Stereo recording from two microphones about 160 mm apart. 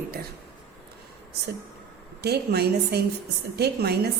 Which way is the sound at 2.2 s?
85° right.